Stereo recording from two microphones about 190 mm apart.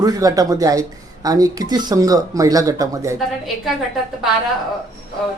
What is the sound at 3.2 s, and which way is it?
Speech, centre (ahead or behind).